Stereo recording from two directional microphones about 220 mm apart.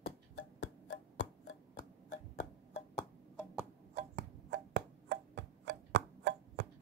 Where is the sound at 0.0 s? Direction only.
70° left (ahead or behind).